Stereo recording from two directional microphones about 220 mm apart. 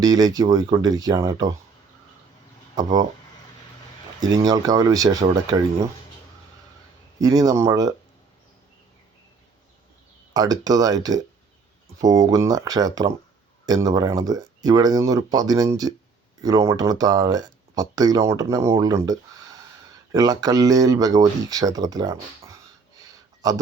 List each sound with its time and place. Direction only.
0.0 s speech: 15° right (ahead or behind)
4.2 s speech: 15° right (ahead or behind)
7.2 s speech: 15° right (ahead or behind)
10.3 s speech: 15° right (ahead or behind)
20.1 s speech: 15° right (ahead or behind)
23.0 s a sound: 15° right (ahead or behind)